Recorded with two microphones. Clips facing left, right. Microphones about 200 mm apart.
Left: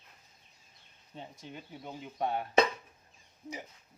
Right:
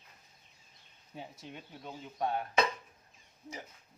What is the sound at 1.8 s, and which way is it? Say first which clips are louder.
Speech: left 1 dB; 20° left (ahead or behind).